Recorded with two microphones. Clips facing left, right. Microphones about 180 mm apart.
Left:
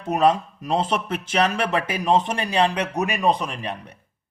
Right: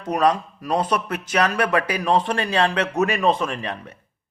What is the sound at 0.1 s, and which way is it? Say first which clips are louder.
Speech: left 1 dB; 25° left (ahead or behind).